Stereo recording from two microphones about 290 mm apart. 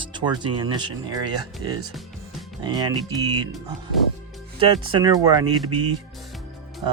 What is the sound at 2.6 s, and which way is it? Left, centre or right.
Speech, centre.